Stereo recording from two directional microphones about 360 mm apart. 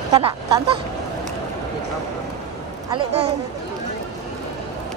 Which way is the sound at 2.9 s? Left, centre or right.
Centre.